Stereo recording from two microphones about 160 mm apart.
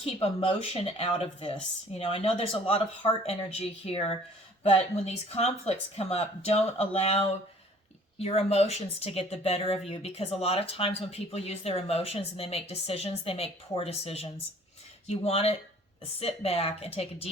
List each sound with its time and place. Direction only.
0.4 s speech: 40° left (ahead or behind)